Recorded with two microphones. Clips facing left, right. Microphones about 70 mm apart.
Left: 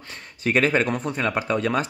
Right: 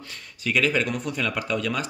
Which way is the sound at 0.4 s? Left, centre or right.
Left.